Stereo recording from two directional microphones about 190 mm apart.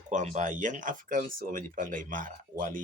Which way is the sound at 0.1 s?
40° right (ahead or behind).